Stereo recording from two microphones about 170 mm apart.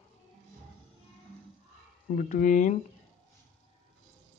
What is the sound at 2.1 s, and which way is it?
Speech, 50° left (ahead or behind).